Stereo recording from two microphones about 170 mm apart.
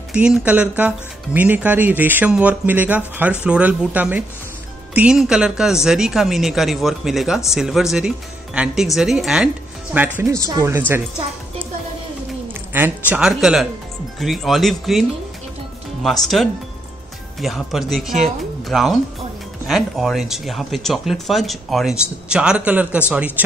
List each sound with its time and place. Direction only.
0.1 s speech: 5° right (ahead or behind)
13.1 s speech: 5° right (ahead or behind)